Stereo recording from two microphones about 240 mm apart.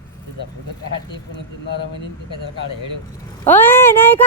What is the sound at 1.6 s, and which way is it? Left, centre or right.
Speech, left.